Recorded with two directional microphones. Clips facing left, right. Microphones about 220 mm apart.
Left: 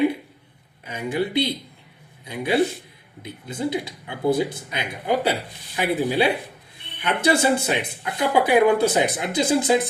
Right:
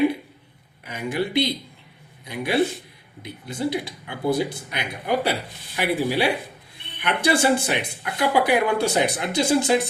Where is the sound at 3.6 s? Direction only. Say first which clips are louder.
Even; 20° left (ahead or behind).